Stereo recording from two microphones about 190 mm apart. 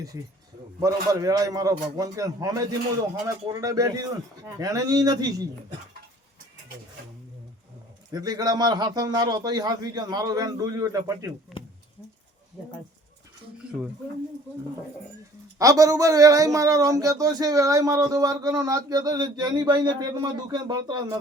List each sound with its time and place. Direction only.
0.8 s a man's voice: 20° right (ahead or behind)
8.1 s a man's voice: 20° right (ahead or behind)
15.5 s a man's voice: 20° right (ahead or behind)